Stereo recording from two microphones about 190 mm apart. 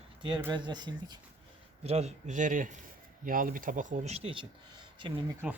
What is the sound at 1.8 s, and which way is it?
Speech, 35° right (ahead or behind).